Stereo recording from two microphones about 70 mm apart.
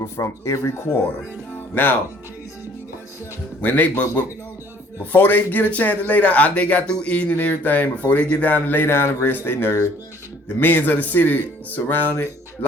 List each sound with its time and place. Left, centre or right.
0.0 s speech: left
1.7 s speech: left
3.6 s speech: left
5.1 s speech: left